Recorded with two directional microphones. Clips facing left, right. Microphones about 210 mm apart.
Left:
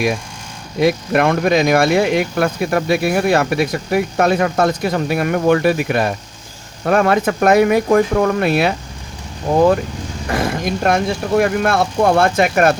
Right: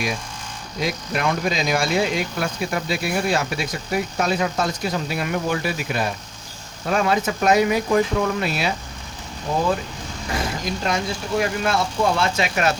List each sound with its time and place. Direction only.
0.8 s speech: 60° left (ahead or behind)
10.2 s speech: 55° left (ahead or behind)